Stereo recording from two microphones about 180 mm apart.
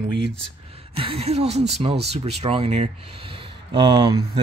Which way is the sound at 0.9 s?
30° right (ahead or behind).